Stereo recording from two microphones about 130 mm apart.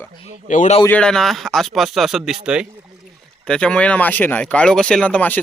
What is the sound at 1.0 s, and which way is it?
Speech, 5° left (ahead or behind).